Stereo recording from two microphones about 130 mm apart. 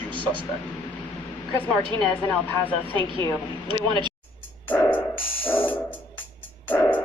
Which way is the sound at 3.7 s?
35° right (ahead or behind).